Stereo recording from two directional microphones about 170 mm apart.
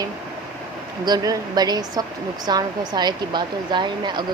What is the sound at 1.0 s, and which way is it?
Speech, 20° right (ahead or behind).